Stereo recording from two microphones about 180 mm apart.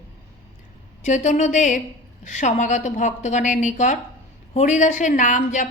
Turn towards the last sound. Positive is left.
turn(degrees=45)  # may be behind; listen again after turning